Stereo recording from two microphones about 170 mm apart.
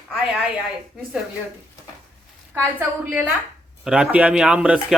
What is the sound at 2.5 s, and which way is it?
A man's voice, 10° right (ahead or behind).